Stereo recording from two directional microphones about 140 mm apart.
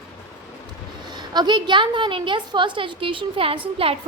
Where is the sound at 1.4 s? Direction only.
30° right (ahead or behind).